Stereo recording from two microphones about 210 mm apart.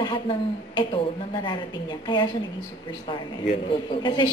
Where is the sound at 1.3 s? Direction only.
20° left (ahead or behind).